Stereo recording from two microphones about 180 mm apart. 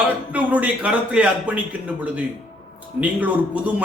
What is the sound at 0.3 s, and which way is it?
A man's voice, 10° right (ahead or behind).